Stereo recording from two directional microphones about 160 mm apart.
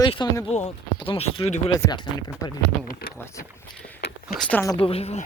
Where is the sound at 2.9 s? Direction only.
65° left (ahead or behind).